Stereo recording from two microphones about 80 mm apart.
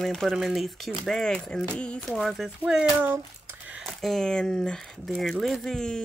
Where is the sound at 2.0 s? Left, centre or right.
Centre.